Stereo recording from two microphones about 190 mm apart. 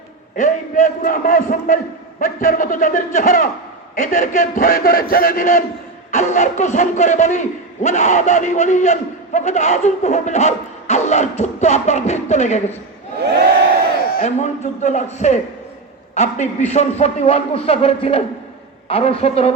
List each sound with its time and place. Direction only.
0.3 s a man's voice: 40° left (ahead or behind)
14.3 s a man's voice: 35° left (ahead or behind)